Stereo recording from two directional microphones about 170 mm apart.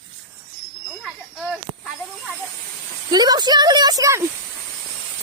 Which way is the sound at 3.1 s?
25° right (ahead or behind).